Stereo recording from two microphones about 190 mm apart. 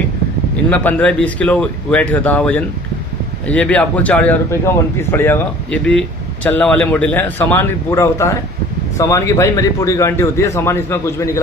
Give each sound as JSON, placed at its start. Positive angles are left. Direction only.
{"t": 0.7, "sound": "speech", "side_deg": 10}